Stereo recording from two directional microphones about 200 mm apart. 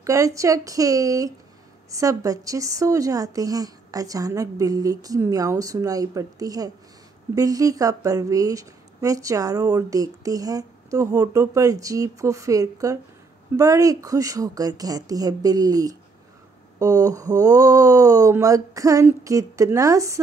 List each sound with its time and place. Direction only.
0.0 s speech: 15° right (ahead or behind)